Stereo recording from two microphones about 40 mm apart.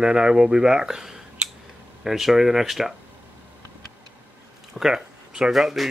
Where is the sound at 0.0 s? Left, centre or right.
Centre.